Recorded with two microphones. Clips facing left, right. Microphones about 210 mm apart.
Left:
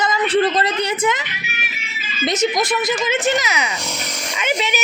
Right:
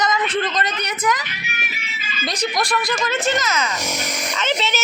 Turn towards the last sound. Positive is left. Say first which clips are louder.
# left 1 dB
turn(degrees=10)  # may be behind; listen again after turning